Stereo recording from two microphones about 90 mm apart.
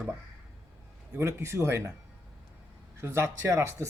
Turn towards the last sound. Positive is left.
turn(degrees=-30)  # may be behind; listen again after turning